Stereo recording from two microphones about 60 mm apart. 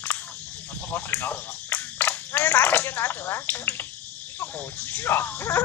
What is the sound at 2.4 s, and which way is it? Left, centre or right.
Speech, left.